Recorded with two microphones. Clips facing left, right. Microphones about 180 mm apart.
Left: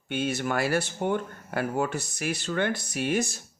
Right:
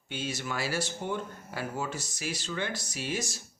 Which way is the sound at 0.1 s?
60° left (ahead or behind).